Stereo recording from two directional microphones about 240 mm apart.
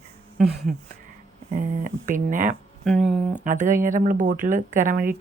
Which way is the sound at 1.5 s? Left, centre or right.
Right.